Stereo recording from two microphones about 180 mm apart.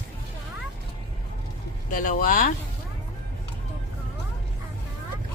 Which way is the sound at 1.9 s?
50° left (ahead or behind).